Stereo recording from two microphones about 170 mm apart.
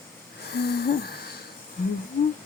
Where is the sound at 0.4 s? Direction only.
70° left (ahead or behind).